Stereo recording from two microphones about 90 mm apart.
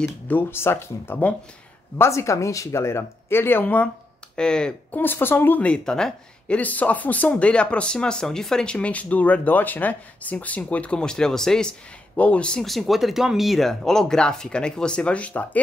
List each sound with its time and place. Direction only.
0.3 s speech: 25° left (ahead or behind)
2.0 s speech: 35° left (ahead or behind); by 4.7 s 10° left (ahead or behind)
4.9 s speech: 25° left (ahead or behind)